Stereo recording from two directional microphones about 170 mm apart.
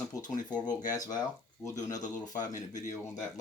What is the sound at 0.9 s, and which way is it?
Speech, 20° left (ahead or behind).